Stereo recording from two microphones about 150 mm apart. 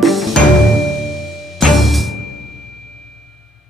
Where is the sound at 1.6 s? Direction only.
Centre (ahead or behind).